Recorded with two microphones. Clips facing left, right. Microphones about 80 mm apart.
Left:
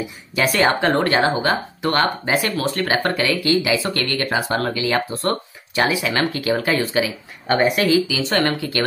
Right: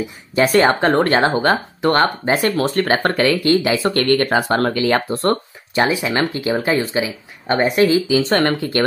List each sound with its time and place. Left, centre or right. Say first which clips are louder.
0.4 s speech: right 4 dB; right
5.8 s speech: right 2 dB; right